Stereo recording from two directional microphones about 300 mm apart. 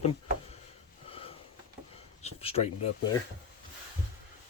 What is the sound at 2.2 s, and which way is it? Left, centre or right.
Speech, left.